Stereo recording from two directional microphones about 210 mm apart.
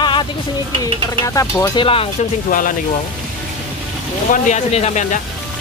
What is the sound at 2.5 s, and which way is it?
Speech, 40° left (ahead or behind).